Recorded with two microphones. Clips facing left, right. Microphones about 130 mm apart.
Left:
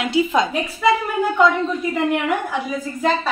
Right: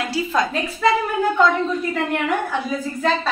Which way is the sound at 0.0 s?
20° left (ahead or behind).